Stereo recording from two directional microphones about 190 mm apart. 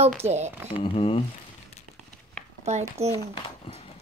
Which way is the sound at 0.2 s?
35° right (ahead or behind).